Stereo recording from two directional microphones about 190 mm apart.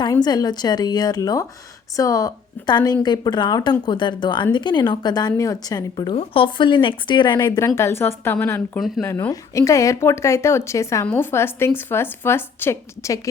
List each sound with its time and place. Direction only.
0.0 s a woman's voice: 20° left (ahead or behind)